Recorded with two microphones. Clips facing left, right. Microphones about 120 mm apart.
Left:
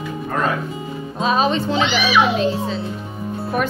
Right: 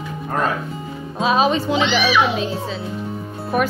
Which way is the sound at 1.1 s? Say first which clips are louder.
Right 1 dB; 5° right (ahead or behind).